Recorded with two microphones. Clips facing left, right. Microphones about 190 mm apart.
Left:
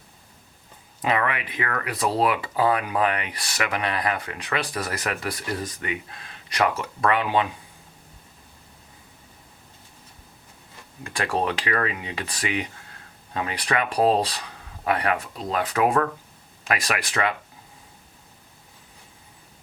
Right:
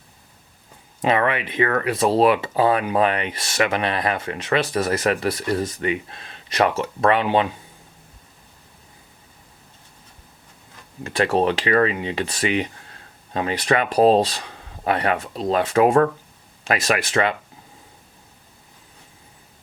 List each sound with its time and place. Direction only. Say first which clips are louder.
1.0 s speech: right 5 dB; 30° right (ahead or behind)
11.0 s speech: right 6 dB; 25° right (ahead or behind)